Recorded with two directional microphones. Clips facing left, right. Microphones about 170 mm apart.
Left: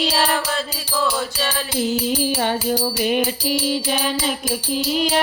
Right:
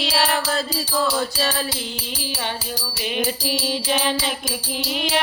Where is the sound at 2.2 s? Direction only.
50° left (ahead or behind).